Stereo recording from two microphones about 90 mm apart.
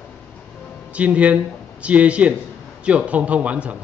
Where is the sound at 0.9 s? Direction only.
15° right (ahead or behind).